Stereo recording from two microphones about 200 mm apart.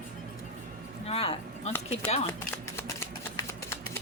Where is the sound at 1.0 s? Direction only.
30° left (ahead or behind).